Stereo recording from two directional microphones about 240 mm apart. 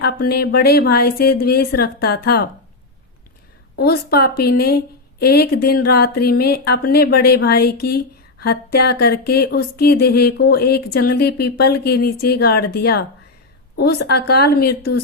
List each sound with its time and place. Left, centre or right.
0.0 s speech: left
3.8 s speech: left